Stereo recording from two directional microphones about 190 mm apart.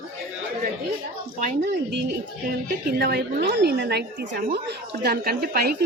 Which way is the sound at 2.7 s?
60° right (ahead or behind).